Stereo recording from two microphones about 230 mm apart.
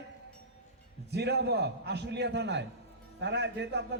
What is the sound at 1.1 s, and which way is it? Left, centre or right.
A man's voice, right.